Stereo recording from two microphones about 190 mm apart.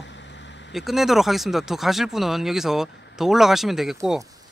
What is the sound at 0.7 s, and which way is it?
Speech, centre (ahead or behind).